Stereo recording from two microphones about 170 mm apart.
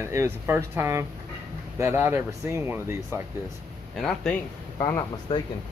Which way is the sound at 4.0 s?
Centre (ahead or behind).